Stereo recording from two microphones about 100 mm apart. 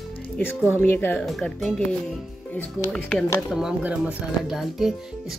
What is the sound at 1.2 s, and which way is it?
Speech, 5° left (ahead or behind).